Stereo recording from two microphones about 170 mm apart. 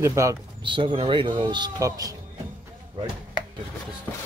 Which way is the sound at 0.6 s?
30° right (ahead or behind).